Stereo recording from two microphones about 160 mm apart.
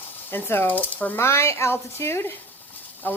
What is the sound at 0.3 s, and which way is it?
Speech, 15° left (ahead or behind).